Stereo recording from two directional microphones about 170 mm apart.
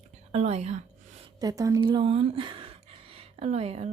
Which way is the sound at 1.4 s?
20° right (ahead or behind).